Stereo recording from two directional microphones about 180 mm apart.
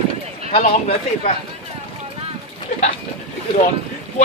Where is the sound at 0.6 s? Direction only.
40° left (ahead or behind).